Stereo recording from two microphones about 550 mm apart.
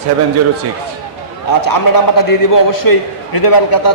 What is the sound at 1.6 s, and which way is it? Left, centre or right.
A man's voice, left.